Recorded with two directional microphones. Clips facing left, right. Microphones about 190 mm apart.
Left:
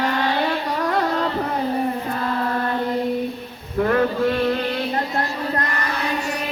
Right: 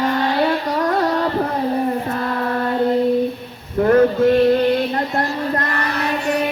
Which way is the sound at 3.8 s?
40° right (ahead or behind).